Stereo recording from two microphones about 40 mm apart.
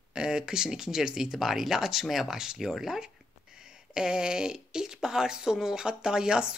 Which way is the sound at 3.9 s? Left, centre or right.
Centre.